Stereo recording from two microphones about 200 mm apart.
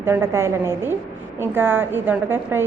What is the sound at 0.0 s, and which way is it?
A woman's voice, 10° right (ahead or behind).